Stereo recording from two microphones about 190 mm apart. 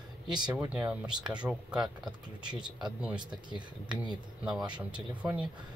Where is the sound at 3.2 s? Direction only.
25° right (ahead or behind).